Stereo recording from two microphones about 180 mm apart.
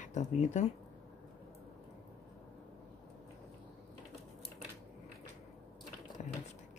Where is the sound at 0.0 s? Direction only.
40° left (ahead or behind).